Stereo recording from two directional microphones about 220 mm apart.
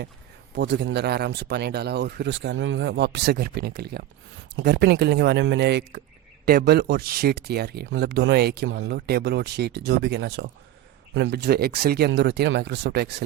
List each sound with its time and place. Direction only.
0.5 s speech: 50° right (ahead or behind)